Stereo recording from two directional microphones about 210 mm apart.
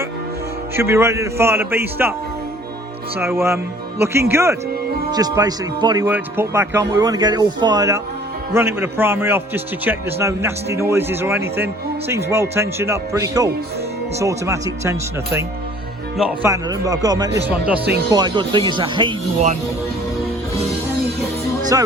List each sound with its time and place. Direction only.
0.8 s a man's voice: 10° right (ahead or behind)
3.2 s a man's voice: 10° right (ahead or behind)
16.5 s a man's voice: 15° right (ahead or behind)
21.7 s a man's voice: 15° right (ahead or behind)